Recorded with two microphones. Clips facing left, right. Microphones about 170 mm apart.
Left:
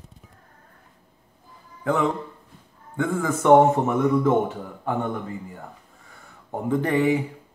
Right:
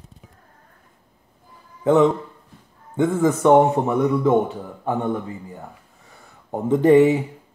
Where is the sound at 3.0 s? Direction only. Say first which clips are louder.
Right 6 dB; 20° right (ahead or behind).